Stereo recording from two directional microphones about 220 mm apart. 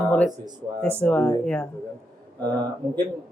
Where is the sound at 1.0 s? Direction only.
5° left (ahead or behind).